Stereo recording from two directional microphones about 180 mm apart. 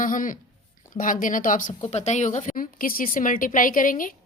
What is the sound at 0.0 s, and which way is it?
A woman's voice, 50° left (ahead or behind).